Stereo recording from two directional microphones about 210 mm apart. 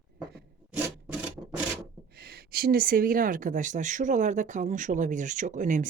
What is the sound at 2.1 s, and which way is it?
Speech, 50° right (ahead or behind).